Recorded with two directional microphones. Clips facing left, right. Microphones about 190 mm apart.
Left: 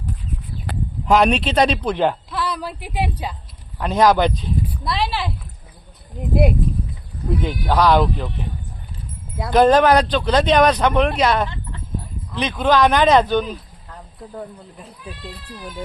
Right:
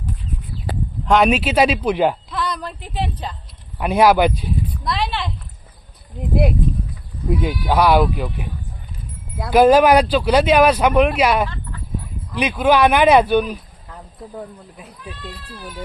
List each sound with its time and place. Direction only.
1.0 s speech: centre (ahead or behind)
2.3 s speech: 5° left (ahead or behind)
3.8 s speech: 10° right (ahead or behind)
4.8 s speech: centre (ahead or behind)
7.3 s speech: 10° right (ahead or behind)
11.4 s sheep: 20° left (ahead or behind)
12.3 s speech: 10° right (ahead or behind)